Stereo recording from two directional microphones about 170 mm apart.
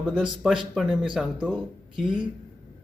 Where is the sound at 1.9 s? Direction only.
30° right (ahead or behind).